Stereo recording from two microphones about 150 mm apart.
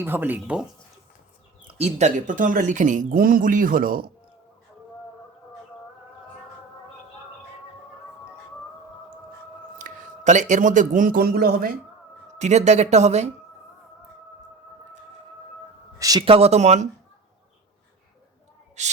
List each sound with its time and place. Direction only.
0.0 s speech: 15° right (ahead or behind)
1.6 s speech: 45° right (ahead or behind); by 4.0 s 70° right (ahead or behind)
9.7 s speech: 60° right (ahead or behind); by 11.7 s 85° right
12.4 s speech: 50° right (ahead or behind)
16.0 s a sound: 25° right (ahead or behind)
16.2 s speech: 40° right (ahead or behind)